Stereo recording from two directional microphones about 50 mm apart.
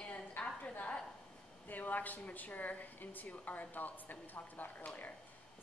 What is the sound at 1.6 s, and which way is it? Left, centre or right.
A woman's voice, left.